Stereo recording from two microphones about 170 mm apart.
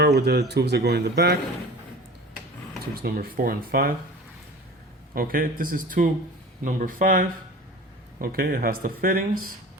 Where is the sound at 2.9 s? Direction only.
60° right (ahead or behind).